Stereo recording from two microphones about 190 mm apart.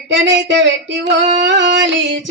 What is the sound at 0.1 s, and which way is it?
Music, 75° right (ahead or behind).